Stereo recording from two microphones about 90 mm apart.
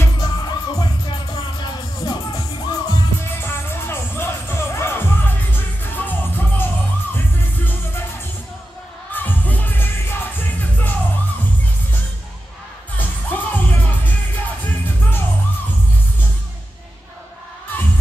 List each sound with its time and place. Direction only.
0.2 s music: 50° left (ahead or behind)
3.3 s music: 25° left (ahead or behind)
9.1 s music: 20° left (ahead or behind)
12.9 s music: 20° left (ahead or behind)